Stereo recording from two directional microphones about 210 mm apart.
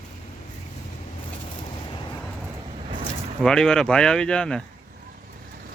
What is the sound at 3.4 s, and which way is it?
Speech, 5° left (ahead or behind).